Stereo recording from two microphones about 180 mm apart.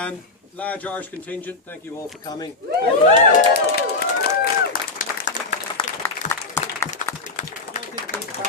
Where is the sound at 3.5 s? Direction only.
60° left (ahead or behind).